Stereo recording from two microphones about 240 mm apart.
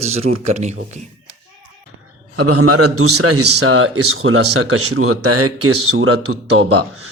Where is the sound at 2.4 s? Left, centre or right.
Right.